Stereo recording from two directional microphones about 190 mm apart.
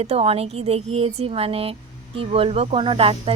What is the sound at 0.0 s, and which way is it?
Speech, 30° right (ahead or behind).